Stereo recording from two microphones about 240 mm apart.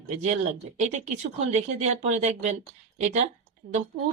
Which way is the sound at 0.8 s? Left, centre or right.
Right.